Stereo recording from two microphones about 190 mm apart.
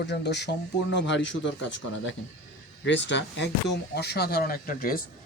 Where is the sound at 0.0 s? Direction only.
65° left (ahead or behind).